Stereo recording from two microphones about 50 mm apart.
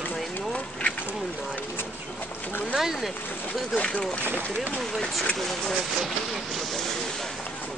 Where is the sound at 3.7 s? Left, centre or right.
Left.